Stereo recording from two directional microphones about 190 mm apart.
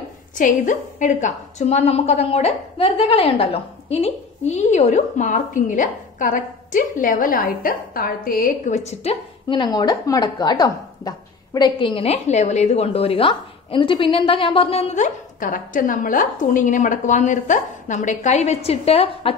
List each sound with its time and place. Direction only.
0.4 s a woman's voice: 45° left (ahead or behind)